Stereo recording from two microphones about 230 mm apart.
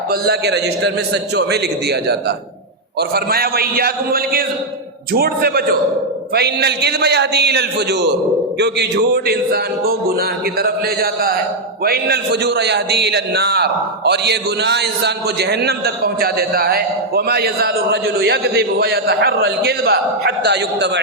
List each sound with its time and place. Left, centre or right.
0.1 s a man's voice: right
3.2 s a man's voice: right